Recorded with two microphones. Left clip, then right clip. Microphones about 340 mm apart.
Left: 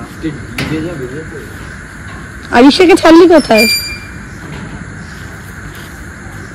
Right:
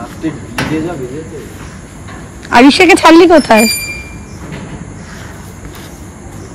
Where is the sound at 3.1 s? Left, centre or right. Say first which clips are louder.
Left 2 dB; right.